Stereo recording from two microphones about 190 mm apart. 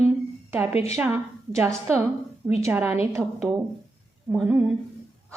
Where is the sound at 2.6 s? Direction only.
10° right (ahead or behind).